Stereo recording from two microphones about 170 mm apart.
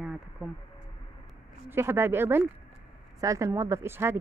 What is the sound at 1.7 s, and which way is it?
Speech, 15° right (ahead or behind).